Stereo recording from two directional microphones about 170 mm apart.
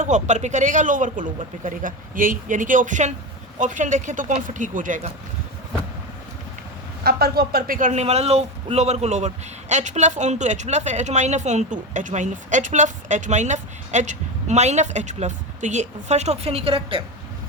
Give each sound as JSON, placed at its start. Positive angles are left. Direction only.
{"t": 0.0, "sound": "speech", "side_deg": -45}
{"t": 7.0, "sound": "speech", "side_deg": -65}